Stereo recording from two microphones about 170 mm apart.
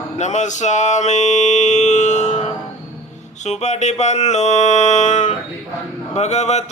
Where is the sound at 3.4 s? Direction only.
40° left (ahead or behind).